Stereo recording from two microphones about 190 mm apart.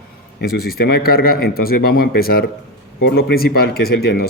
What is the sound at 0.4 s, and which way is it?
Speech, 55° left (ahead or behind).